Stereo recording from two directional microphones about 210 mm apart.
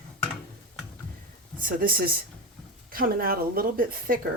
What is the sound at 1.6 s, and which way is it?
Speech, 45° right (ahead or behind).